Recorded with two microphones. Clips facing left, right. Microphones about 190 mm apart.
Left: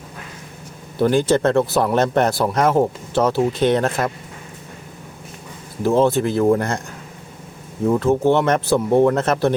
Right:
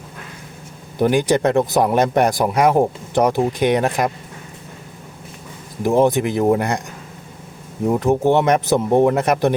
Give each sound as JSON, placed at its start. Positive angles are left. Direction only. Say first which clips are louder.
{"t": 0.9, "sound": "speech", "louder": "even", "side_deg": -15}
{"t": 5.8, "sound": "speech", "louder": "right 1 dB", "side_deg": -15}
{"t": 7.9, "sound": "speech", "louder": "even", "side_deg": -15}